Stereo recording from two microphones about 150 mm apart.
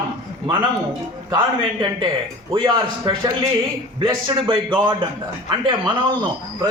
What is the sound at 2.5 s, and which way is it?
Speech, 35° right (ahead or behind).